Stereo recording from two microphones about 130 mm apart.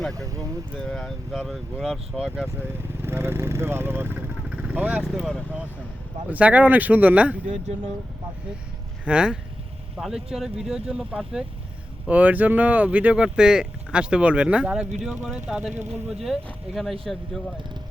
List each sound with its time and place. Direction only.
0.1 s speech: 25° right (ahead or behind)
0.8 s speech: 5° left (ahead or behind)
3.0 s speech: 20° right (ahead or behind)
4.4 s vehicle: 10° right (ahead or behind)
5.0 s speech: centre (ahead or behind)
6.3 s speech: 10° right (ahead or behind)
9.0 s speech: 5° right (ahead or behind)